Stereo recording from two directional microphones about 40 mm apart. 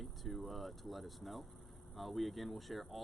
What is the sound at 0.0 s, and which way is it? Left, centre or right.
Speech, centre.